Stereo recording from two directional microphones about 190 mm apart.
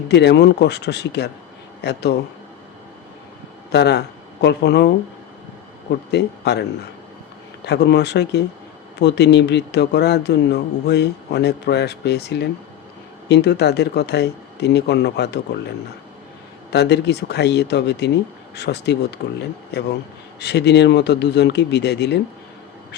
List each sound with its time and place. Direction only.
0.1 s a man's voice: 60° left (ahead or behind)
3.7 s speech: 60° left (ahead or behind)
6.1 s a man's voice: 60° left (ahead or behind)
16.7 s a man's voice: 60° left (ahead or behind)